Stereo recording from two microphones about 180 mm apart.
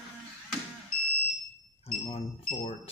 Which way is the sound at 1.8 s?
30° left (ahead or behind).